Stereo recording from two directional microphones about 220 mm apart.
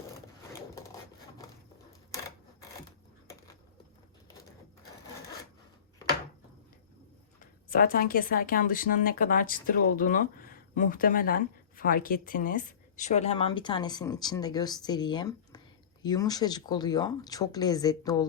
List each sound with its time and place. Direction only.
7.7 s a woman's voice: 40° left (ahead or behind); by 18.3 s 15° left (ahead or behind)